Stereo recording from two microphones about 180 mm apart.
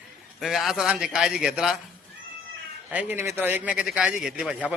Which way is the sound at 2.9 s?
10° right (ahead or behind).